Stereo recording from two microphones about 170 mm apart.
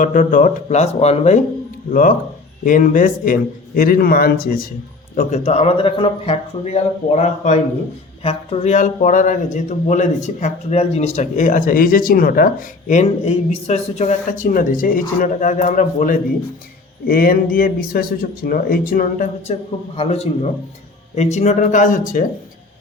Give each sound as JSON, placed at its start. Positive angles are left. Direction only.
{"t": 0.0, "sound": "speech", "side_deg": 50}
{"t": 1.9, "sound": "speech", "side_deg": 50}
{"t": 5.1, "sound": "speech", "side_deg": 40}
{"t": 20.0, "sound": "speech", "side_deg": 40}